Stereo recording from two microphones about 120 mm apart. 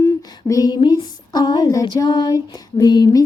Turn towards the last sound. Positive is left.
turn(degrees=35)  # may be behind; listen again after turning